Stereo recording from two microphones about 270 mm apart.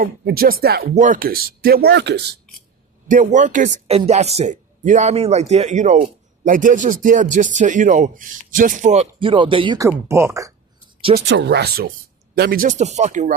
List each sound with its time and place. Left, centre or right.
0.0 s speech: right
3.1 s speech: right; by 10.5 s centre
11.3 s speech: right